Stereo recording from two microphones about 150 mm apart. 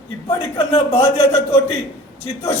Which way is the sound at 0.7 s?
40° left (ahead or behind).